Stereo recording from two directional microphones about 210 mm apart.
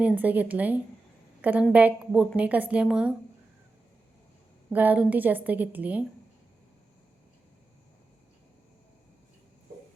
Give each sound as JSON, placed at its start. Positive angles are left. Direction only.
{"t": 0.0, "sound": "a woman's voice", "side_deg": -5}
{"t": 4.7, "sound": "a woman's voice", "side_deg": -10}